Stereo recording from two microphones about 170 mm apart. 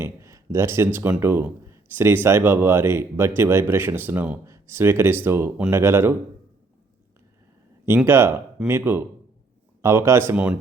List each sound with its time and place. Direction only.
0.0 s a sound: 15° right (ahead or behind)
0.9 s speech: 10° right (ahead or behind)
7.9 s speech: 15° right (ahead or behind)